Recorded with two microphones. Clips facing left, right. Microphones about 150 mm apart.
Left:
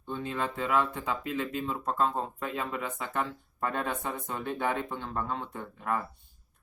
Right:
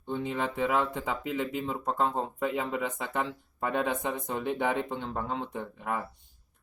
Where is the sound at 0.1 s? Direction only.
15° right (ahead or behind).